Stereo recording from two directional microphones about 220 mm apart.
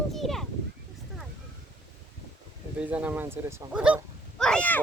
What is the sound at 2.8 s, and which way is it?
Speech, 5° right (ahead or behind).